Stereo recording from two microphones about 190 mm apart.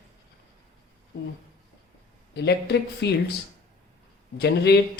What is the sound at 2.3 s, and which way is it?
Speech, 60° left (ahead or behind).